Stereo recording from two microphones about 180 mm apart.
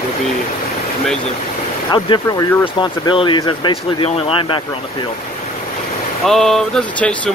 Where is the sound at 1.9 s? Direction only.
25° left (ahead or behind).